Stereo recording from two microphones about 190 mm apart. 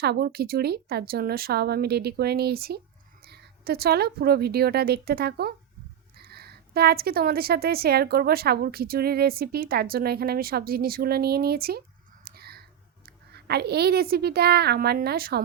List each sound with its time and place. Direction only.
0.0 s a woman's voice: 55° right (ahead or behind)
12.2 s a sound: 55° right (ahead or behind)
13.3 s speech: 60° right (ahead or behind)